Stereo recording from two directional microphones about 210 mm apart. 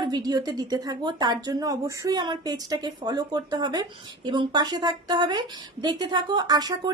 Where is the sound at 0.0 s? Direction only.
20° right (ahead or behind).